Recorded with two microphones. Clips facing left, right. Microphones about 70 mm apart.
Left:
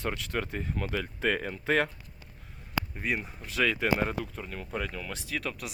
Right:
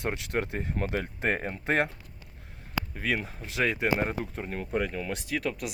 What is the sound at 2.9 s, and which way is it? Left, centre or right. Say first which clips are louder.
Speech: right 4 dB; right.